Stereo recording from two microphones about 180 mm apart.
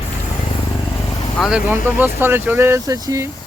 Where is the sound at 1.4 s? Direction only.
5° right (ahead or behind).